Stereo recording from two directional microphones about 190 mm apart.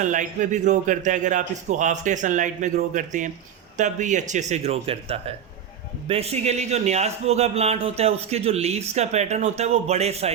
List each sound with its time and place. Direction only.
0.0 s a man's voice: 40° right (ahead or behind)